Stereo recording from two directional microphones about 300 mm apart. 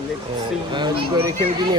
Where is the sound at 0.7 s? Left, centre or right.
Centre.